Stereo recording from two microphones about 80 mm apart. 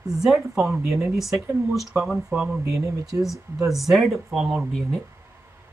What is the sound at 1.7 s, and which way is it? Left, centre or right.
Speech, centre.